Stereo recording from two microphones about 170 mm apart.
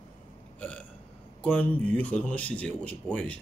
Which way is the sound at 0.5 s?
5° left (ahead or behind).